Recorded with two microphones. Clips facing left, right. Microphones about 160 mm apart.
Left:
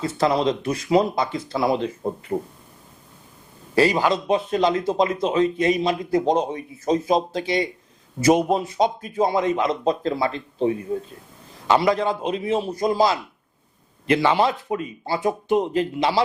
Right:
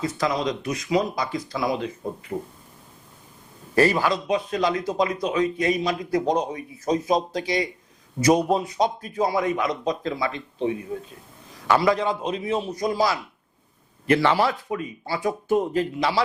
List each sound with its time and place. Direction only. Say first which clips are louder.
0.0 s speech: left 4 dB; 30° left (ahead or behind)
3.8 s speech: left 1 dB; 15° left (ahead or behind); by 10.8 s 35° left (ahead or behind)
11.9 s speech: left 1 dB; 35° left (ahead or behind)